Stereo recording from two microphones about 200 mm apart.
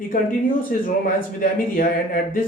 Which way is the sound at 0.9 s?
40° left (ahead or behind).